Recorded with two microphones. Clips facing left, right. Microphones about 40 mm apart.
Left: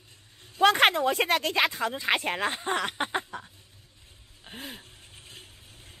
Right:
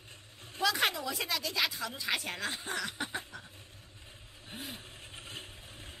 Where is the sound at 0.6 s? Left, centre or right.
Left.